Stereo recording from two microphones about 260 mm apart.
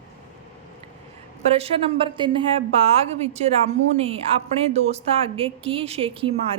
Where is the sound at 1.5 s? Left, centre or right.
Right.